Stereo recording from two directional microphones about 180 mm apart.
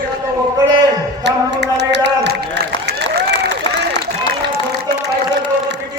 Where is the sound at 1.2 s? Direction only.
70° right (ahead or behind).